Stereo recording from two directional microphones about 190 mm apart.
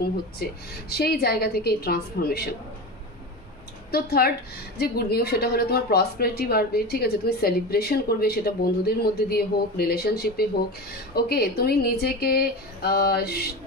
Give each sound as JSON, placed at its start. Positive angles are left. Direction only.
{"t": 0.4, "sound": "a woman's voice", "side_deg": 55}
{"t": 3.9, "sound": "a woman's voice", "side_deg": 55}